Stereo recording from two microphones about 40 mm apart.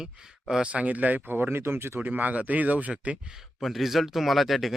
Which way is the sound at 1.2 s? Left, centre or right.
Right.